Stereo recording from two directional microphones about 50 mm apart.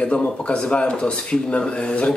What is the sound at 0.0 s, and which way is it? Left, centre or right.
Speech, left.